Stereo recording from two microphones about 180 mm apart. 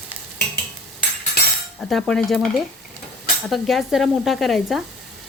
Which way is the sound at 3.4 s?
Centre (ahead or behind).